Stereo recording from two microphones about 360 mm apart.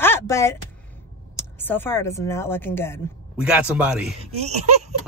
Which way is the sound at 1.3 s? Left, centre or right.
Centre.